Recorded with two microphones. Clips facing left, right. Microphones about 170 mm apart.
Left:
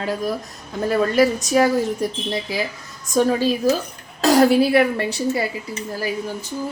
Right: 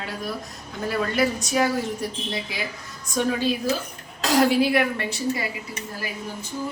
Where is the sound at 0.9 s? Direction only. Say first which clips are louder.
Left 6 dB; 40° left (ahead or behind).